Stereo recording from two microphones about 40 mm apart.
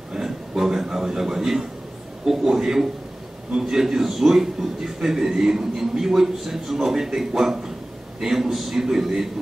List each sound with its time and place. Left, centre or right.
0.1 s a man's voice: centre